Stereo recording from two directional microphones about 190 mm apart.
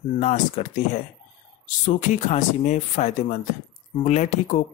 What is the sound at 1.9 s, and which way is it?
Speech, 40° left (ahead or behind).